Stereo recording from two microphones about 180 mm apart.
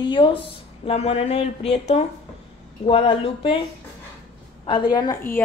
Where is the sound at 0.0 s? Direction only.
25° left (ahead or behind).